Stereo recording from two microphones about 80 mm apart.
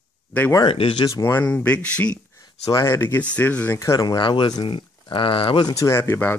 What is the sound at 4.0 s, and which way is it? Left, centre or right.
Speech, left.